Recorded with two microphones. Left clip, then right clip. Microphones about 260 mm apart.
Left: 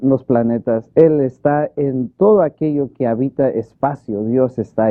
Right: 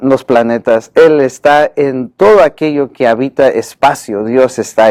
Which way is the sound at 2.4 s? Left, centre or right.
Centre.